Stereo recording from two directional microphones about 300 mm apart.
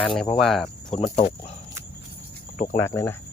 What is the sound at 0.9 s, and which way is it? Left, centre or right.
Speech, left.